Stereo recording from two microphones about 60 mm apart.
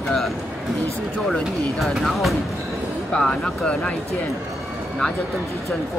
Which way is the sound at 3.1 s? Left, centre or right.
Centre.